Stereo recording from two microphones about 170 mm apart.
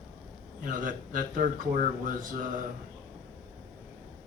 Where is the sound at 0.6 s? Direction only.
55° right (ahead or behind).